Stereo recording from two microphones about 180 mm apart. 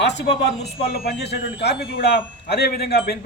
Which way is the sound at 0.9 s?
60° left (ahead or behind).